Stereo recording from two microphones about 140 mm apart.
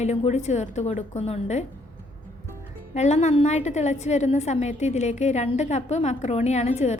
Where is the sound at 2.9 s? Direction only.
55° left (ahead or behind).